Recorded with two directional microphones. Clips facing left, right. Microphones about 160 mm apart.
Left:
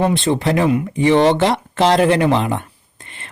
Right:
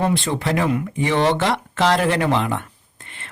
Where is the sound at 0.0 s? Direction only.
20° left (ahead or behind).